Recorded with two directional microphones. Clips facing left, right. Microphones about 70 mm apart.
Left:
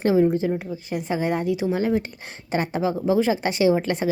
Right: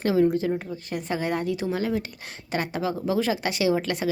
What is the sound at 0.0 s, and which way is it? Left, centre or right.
A woman's voice, left.